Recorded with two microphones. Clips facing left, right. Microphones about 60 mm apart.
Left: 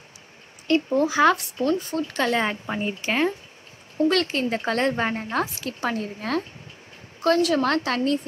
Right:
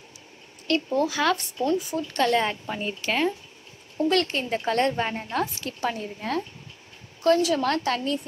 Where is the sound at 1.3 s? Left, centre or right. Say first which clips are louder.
Left 1 dB; centre.